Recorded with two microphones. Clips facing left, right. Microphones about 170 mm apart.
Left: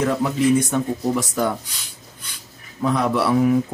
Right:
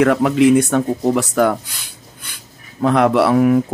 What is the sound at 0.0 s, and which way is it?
Speech, 75° right (ahead or behind).